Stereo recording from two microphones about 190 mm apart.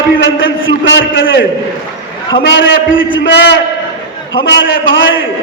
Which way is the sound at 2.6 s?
80° left.